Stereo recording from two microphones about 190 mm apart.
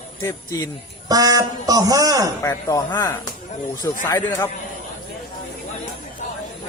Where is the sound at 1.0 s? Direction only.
20° right (ahead or behind).